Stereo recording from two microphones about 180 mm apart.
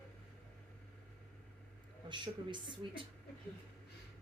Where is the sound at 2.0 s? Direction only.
25° right (ahead or behind).